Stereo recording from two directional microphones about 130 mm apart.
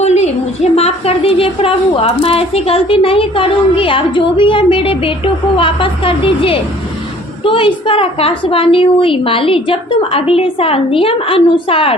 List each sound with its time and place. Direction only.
0.0 s a woman's voice: 60° left (ahead or behind)